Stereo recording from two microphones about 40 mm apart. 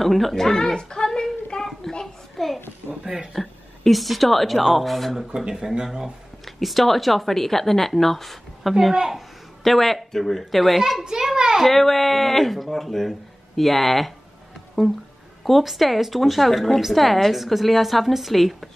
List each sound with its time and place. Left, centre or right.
0.0 s a sound: centre
2.3 s a sound: centre
3.3 s a woman's voice: centre
5.5 s speech: centre
6.4 s a woman's voice: centre
8.9 s speech: centre
9.6 s a woman's voice: centre
11.1 s a child's voice: centre
11.6 s a woman's voice: centre
15.4 s a woman's voice: centre